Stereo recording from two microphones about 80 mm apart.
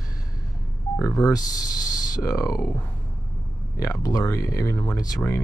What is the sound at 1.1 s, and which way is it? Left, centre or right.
Speech, left.